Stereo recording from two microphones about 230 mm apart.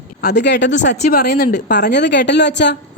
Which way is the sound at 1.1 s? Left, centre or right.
Left.